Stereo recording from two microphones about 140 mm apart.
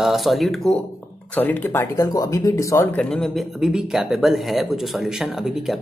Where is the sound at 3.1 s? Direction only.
Centre (ahead or behind).